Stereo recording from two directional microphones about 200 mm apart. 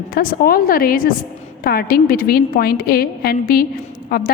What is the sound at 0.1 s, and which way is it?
A woman's voice, 45° left (ahead or behind).